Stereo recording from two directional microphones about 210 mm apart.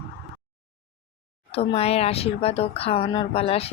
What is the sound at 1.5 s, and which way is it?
Speech, 30° left (ahead or behind).